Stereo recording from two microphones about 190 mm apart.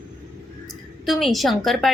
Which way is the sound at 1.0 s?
Centre (ahead or behind).